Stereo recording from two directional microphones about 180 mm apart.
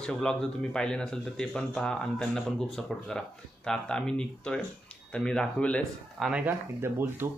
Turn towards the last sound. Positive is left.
turn(degrees=-15)  # may be behind; listen again after turning